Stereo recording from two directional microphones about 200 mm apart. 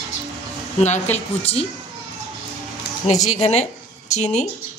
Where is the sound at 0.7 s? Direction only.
35° left (ahead or behind).